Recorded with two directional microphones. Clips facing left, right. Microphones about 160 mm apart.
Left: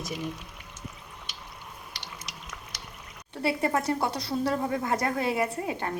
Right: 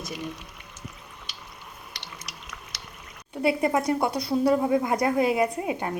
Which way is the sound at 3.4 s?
15° right (ahead or behind).